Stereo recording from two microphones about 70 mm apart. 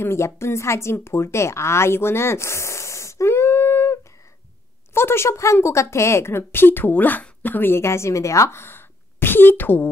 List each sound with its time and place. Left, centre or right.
0.0 s a woman's voice: left